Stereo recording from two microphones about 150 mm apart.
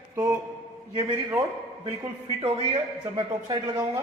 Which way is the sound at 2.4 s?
40° right (ahead or behind).